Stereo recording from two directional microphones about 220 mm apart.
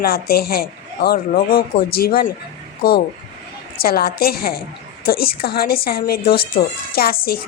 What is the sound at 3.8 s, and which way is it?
Speech, 45° left (ahead or behind).